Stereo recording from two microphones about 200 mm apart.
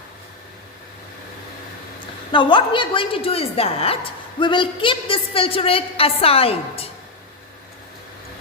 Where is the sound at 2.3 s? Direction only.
25° left (ahead or behind).